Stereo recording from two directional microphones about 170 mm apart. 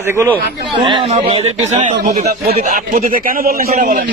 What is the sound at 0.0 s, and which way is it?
Speech, 15° right (ahead or behind).